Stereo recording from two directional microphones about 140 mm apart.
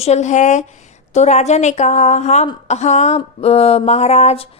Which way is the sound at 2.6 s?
55° left (ahead or behind).